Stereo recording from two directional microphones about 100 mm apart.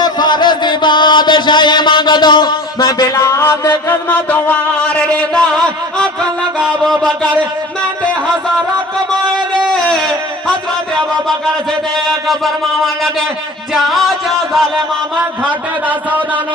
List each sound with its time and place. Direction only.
0.0 s chant: 45° left (ahead or behind)
3.2 s music: 25° left (ahead or behind)
3.8 s music: 15° left (ahead or behind)
9.6 s a sound: 5° left (ahead or behind)
13.7 s music: centre (ahead or behind)
15.4 s speech: 15° right (ahead or behind)